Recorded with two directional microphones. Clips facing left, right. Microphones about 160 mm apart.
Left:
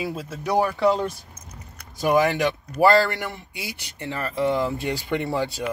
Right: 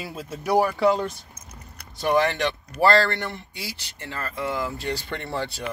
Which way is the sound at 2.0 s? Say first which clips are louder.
Left 2 dB; 5° left (ahead or behind).